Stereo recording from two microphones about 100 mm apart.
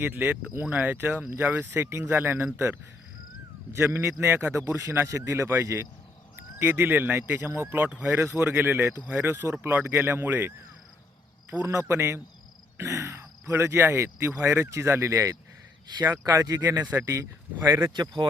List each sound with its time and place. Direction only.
0.0 s speech: 20° right (ahead or behind)
3.8 s speech: 25° right (ahead or behind)
11.6 s speech: 30° right (ahead or behind)